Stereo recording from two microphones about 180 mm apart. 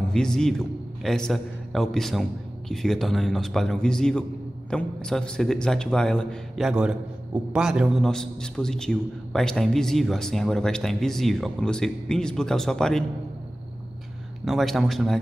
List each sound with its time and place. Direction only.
0.1 s a man's voice: 5° left (ahead or behind)
14.4 s a man's voice: centre (ahead or behind)